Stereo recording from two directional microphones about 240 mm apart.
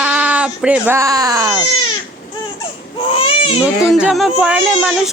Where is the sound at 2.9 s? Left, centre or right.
Left.